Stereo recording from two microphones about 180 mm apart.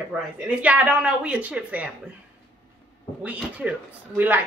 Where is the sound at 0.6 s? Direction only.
10° right (ahead or behind).